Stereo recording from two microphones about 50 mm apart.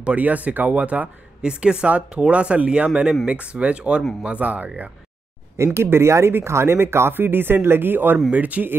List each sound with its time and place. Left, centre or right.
0.0 s speech: right
1.4 s speech: centre
5.6 s speech: right
8.3 s speech: right